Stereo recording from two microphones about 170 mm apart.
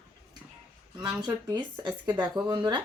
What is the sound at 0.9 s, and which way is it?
Speech, 25° right (ahead or behind).